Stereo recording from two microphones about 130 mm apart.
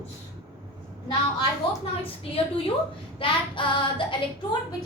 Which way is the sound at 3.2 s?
40° left (ahead or behind).